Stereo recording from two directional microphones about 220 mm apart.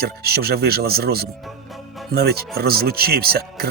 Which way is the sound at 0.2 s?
45° right (ahead or behind).